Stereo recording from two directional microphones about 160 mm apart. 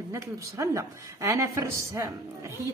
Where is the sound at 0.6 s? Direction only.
20° right (ahead or behind).